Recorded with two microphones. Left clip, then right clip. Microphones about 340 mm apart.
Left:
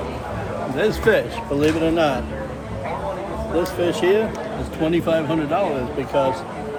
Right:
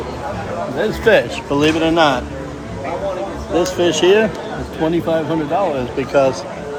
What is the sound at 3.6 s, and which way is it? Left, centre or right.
Speech, right.